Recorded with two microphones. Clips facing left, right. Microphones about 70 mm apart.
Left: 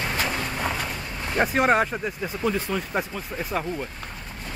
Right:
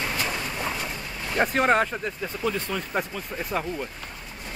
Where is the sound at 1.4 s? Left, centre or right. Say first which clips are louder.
Left 1 dB; centre.